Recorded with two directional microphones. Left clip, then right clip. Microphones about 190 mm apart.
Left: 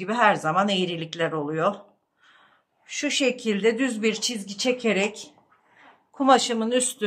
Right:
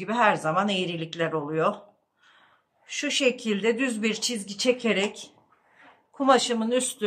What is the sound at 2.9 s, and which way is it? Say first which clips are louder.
A woman's voice: even; 15° left (ahead or behind).